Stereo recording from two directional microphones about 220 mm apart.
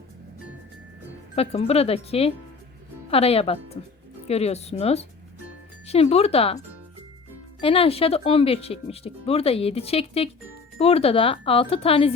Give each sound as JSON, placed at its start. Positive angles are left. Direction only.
{"t": 1.4, "sound": "speech", "side_deg": 25}
{"t": 7.6, "sound": "speech", "side_deg": 25}